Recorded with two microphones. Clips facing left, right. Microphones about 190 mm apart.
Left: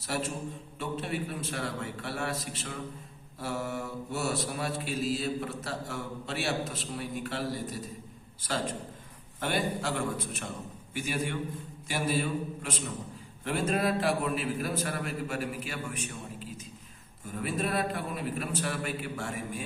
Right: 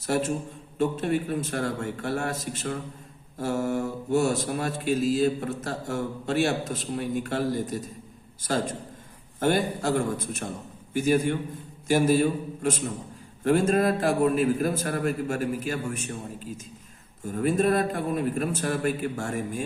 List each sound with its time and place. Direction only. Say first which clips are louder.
0.0 s speech: right 7 dB; 45° right (ahead or behind)
17.2 s speech: right 9 dB; 45° right (ahead or behind)